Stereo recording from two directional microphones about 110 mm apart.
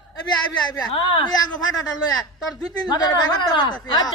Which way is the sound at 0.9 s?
55° left (ahead or behind).